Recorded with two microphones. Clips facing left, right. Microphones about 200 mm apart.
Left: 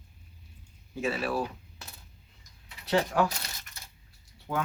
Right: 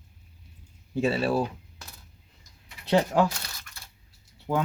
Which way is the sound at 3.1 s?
25° right (ahead or behind).